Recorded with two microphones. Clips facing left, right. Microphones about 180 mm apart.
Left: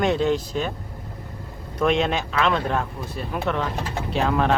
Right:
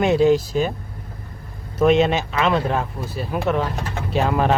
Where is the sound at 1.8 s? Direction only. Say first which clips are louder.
Right 5 dB; 5° right (ahead or behind).